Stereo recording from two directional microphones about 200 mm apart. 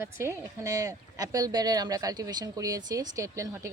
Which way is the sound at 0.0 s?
15° right (ahead or behind).